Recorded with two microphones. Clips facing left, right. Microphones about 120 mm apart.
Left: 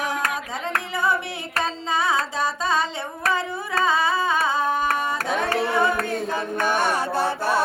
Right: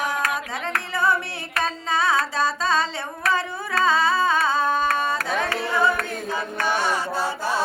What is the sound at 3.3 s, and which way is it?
Carnatic music, 15° left (ahead or behind).